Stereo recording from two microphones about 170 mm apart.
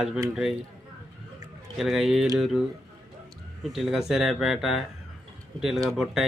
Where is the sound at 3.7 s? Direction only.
Centre (ahead or behind).